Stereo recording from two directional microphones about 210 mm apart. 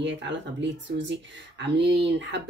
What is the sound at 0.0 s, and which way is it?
Speech, 55° right (ahead or behind).